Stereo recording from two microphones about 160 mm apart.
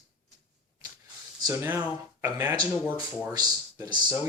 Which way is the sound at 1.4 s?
15° right (ahead or behind).